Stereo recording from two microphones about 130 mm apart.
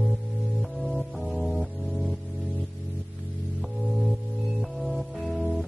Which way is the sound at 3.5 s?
Centre (ahead or behind).